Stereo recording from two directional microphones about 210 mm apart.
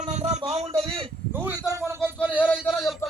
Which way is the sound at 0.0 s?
30° right (ahead or behind).